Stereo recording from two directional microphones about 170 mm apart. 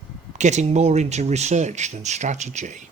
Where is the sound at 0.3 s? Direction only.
45° right (ahead or behind).